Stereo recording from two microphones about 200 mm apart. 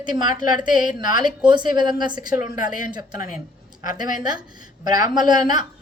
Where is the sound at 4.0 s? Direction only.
20° right (ahead or behind).